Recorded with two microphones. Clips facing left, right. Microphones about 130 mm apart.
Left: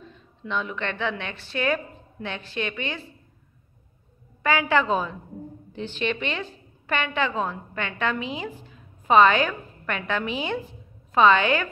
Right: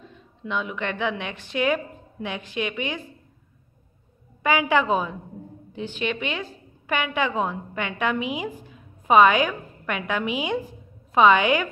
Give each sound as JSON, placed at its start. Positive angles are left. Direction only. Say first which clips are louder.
{"t": 0.4, "sound": "a woman's voice", "louder": "right 1 dB", "side_deg": -10}
{"t": 4.4, "sound": "a woman's voice", "louder": "right 1 dB", "side_deg": -15}